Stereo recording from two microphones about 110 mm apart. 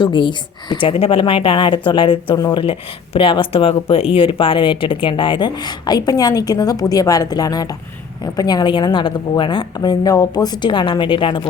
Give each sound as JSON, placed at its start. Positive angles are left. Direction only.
{"t": 0.0, "sound": "speech", "side_deg": 50}